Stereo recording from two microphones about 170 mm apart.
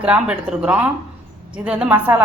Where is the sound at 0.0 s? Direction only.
10° right (ahead or behind).